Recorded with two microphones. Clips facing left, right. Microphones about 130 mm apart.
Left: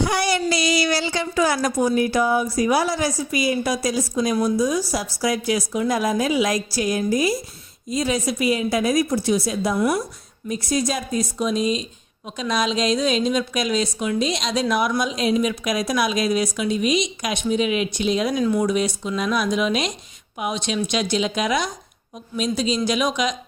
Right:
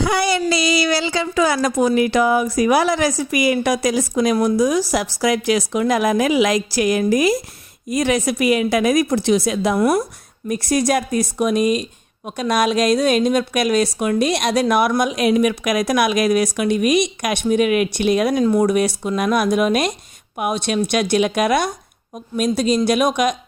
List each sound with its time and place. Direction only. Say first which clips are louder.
1.7 s a woman's voice: right 3 dB; 90° right
7.9 s a woman's voice: right 4 dB; 75° right (ahead or behind); by 10.0 s 60° right (ahead or behind)
10.5 s speech: right 5 dB; 70° right (ahead or behind)